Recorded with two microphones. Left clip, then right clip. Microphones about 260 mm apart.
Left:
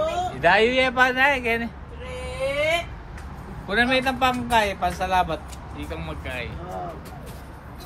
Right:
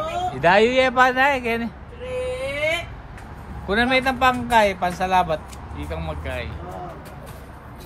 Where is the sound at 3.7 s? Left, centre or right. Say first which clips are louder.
Right 2 dB; right.